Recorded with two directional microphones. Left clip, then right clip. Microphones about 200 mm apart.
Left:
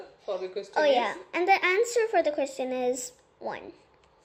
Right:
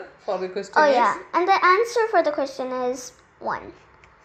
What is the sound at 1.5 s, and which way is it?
Speech, 30° left (ahead or behind).